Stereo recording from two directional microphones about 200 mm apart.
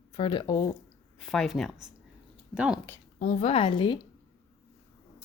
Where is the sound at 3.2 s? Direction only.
35° left (ahead or behind).